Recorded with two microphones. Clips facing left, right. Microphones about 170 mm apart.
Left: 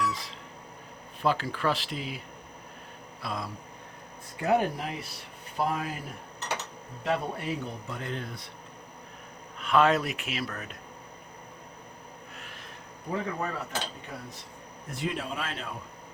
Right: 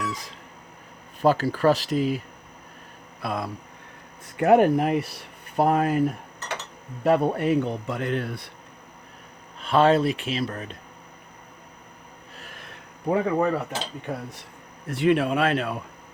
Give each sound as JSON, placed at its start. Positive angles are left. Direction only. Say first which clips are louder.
{"t": 0.0, "sound": "a sound", "louder": "even", "side_deg": -45}
{"t": 1.2, "sound": "speech", "louder": "right 8 dB", "side_deg": -40}
{"t": 3.2, "sound": "speech", "louder": "right 6 dB", "side_deg": -55}
{"t": 7.0, "sound": "speech", "louder": "right 9 dB", "side_deg": -55}
{"t": 9.6, "sound": "speech", "louder": "right 5 dB", "side_deg": -30}
{"t": 13.1, "sound": "speech", "louder": "right 10 dB", "side_deg": -65}
{"t": 14.8, "sound": "speech", "louder": "right 12 dB", "side_deg": -70}